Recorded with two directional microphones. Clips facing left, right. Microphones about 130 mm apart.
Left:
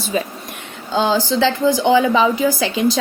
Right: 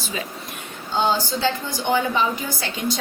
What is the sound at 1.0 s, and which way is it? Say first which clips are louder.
Speech: left 5 dB; 90° left.